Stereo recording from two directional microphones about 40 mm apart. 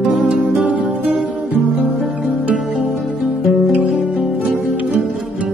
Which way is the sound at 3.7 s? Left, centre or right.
Right.